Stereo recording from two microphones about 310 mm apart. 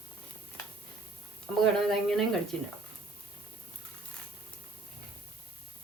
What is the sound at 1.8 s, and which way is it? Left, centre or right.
Speech, centre.